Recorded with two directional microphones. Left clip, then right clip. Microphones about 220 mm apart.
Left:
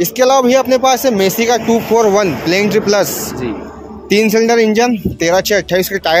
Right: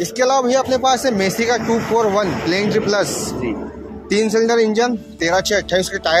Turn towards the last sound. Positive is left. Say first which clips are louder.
# left 4 dB
turn(degrees=35)  # may be behind; listen again after turning